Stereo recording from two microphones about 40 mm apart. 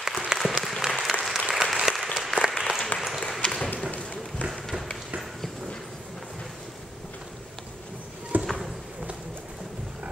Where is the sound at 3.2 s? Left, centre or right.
Centre.